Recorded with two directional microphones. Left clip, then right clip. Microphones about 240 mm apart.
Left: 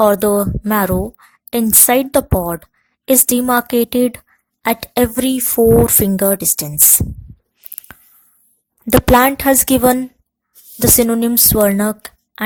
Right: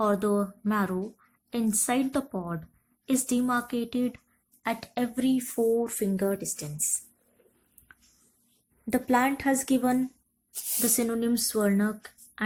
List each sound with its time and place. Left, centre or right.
0.0 s a woman's voice: left
7.9 s a sound: left
8.9 s a woman's voice: left